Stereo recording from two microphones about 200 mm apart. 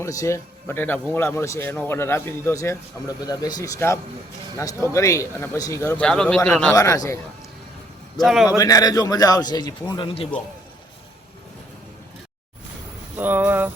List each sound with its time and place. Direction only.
0.0 s speech: 15° left (ahead or behind)
6.7 s speech: 15° left (ahead or behind)
8.2 s a man's voice: centre (ahead or behind)
8.4 s a man's voice: 15° left (ahead or behind)
13.1 s a sound: 10° right (ahead or behind)